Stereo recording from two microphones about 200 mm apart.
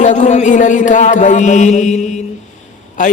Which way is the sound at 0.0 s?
35° left (ahead or behind).